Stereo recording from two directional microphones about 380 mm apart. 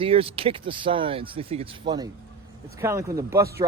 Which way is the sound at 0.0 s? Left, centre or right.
Centre.